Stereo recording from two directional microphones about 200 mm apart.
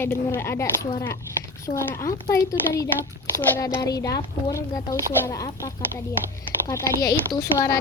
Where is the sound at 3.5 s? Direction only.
15° left (ahead or behind).